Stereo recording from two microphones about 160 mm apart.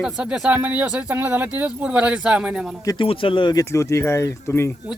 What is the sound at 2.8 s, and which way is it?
Speech, 20° left (ahead or behind).